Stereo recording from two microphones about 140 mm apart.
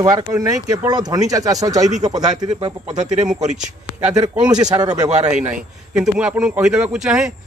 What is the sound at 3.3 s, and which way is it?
Speech, 60° right (ahead or behind).